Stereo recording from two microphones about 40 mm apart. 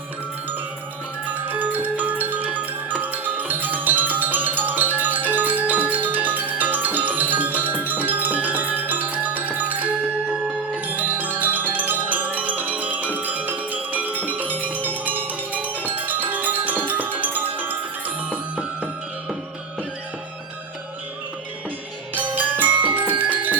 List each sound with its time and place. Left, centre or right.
1.3 s music: right
10.8 s marimba: right
13.1 s music: right
18.3 s music: right
22.1 s music: right